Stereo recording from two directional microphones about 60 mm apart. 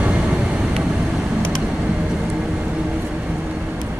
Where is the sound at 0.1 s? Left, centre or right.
Centre.